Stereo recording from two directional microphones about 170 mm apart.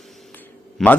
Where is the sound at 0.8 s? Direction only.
Centre (ahead or behind).